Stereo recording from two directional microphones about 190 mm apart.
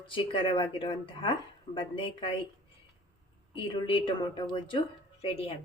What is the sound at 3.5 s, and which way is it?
A woman's voice, 25° left (ahead or behind).